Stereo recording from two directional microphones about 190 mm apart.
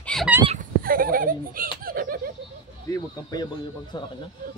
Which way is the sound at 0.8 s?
50° right (ahead or behind).